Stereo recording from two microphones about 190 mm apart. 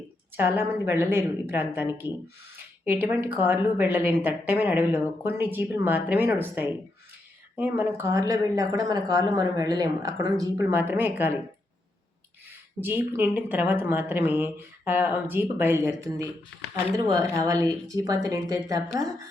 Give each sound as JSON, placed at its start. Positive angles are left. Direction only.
{"t": 0.3, "sound": "speech", "side_deg": -10}
{"t": 12.8, "sound": "speech", "side_deg": -10}